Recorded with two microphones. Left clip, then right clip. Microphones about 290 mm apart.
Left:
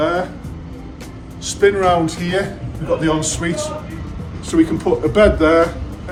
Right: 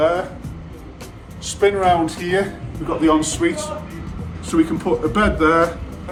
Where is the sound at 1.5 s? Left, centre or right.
Centre.